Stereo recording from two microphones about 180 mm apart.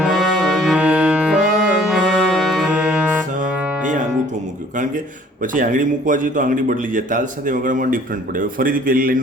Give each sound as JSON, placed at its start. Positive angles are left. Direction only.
{"t": 0.0, "sound": "music", "side_deg": -5}
{"t": 5.4, "sound": "a man's voice", "side_deg": -50}